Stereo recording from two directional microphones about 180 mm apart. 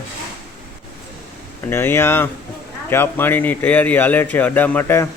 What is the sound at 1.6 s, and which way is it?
Speech, 15° left (ahead or behind).